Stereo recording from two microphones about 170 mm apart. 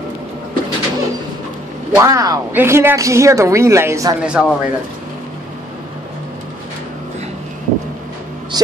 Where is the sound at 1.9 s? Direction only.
20° right (ahead or behind).